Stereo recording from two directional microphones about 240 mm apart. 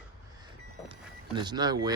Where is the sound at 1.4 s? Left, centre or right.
Centre.